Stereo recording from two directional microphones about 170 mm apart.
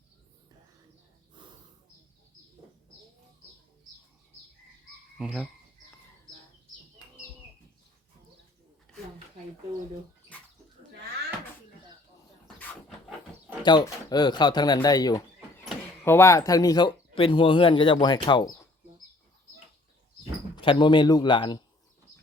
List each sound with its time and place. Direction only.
1.4 s snort: 25° right (ahead or behind)
5.1 s speech: 5° right (ahead or behind)
8.9 s a sound: 5° left (ahead or behind)
13.6 s speech: 25° left (ahead or behind)
20.6 s speech: 30° left (ahead or behind)